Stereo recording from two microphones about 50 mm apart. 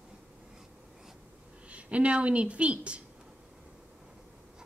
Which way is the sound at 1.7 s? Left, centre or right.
Right.